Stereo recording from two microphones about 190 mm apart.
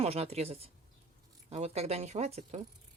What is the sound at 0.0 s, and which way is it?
Speech, 30° right (ahead or behind).